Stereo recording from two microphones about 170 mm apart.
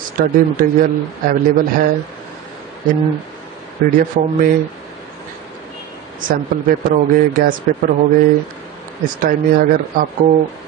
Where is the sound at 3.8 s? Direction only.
60° right (ahead or behind).